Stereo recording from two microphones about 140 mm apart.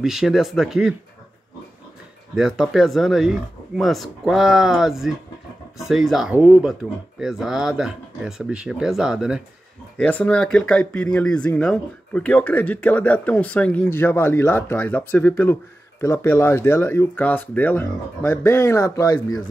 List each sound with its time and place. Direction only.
0.0 s speech: centre (ahead or behind)
2.3 s speech: 5° right (ahead or behind)
9.9 s speech: 10° left (ahead or behind)